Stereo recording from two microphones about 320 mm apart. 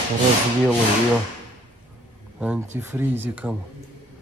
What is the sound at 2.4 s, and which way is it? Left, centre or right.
Speech, centre.